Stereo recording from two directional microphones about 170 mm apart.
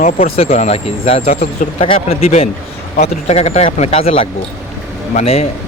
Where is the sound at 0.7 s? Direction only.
35° left (ahead or behind).